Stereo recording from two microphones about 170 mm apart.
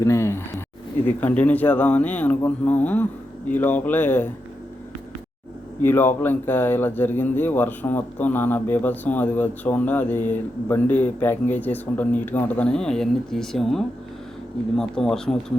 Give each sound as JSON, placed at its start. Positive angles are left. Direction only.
{"t": 0.0, "sound": "speech", "side_deg": 15}
{"t": 5.8, "sound": "speech", "side_deg": 10}